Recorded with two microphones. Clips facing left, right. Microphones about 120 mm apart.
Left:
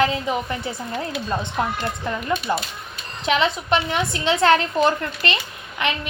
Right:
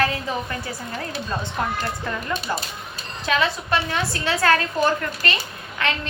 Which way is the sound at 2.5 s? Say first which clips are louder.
Left 3 dB; 20° left (ahead or behind).